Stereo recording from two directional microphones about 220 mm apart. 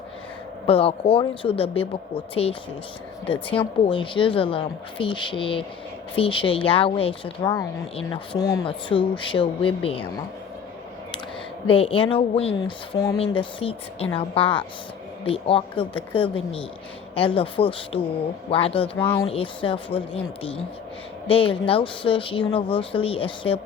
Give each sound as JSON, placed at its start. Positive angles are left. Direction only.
{"t": 0.7, "sound": "speech", "side_deg": 25}
{"t": 3.8, "sound": "speech", "side_deg": 20}
{"t": 11.6, "sound": "speech", "side_deg": 25}